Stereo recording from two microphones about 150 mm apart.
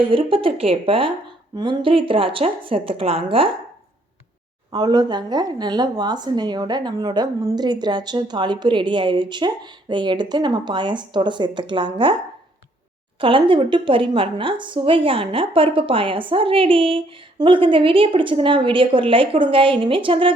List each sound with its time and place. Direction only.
0.1 s a woman's voice: 35° right (ahead or behind)
4.7 s a woman's voice: 30° right (ahead or behind)
13.2 s a woman's voice: 35° right (ahead or behind)